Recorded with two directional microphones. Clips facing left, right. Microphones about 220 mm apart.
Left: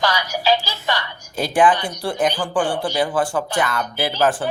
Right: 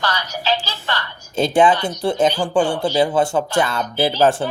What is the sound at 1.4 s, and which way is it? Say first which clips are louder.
Speech: right 2 dB; 25° right (ahead or behind).